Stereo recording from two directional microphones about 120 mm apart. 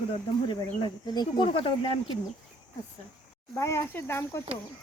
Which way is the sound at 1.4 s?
50° left (ahead or behind).